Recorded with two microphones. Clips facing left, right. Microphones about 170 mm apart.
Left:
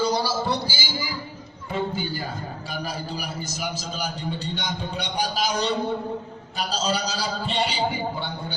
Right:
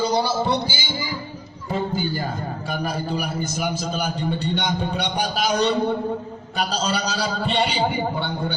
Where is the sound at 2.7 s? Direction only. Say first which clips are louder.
Right 6 dB; 55° right (ahead or behind).